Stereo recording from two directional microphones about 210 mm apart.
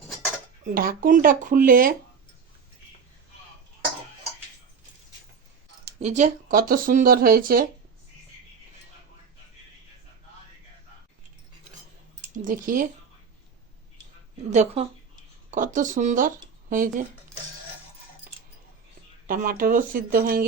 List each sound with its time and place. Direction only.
0.6 s speech: 45° right (ahead or behind)
6.0 s speech: 35° right (ahead or behind)
12.3 s speech: 40° right (ahead or behind)
14.5 s speech: 30° right (ahead or behind)
19.3 s speech: 40° right (ahead or behind)